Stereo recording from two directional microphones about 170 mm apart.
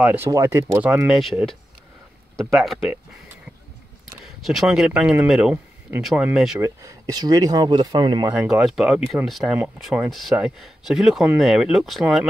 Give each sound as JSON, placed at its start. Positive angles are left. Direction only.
{"t": 0.0, "sound": "speech", "side_deg": -10}
{"t": 4.2, "sound": "speech", "side_deg": 0}
{"t": 6.6, "sound": "speech", "side_deg": -20}
{"t": 8.3, "sound": "speech", "side_deg": -5}